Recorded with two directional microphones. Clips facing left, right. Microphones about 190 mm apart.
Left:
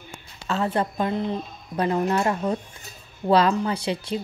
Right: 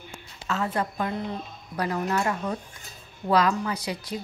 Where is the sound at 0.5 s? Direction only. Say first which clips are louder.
Left 3 dB; 30° left (ahead or behind).